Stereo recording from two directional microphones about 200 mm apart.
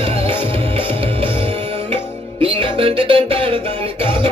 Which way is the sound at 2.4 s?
25° right (ahead or behind).